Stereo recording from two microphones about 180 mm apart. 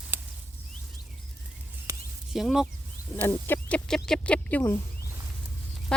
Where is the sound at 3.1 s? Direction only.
10° left (ahead or behind).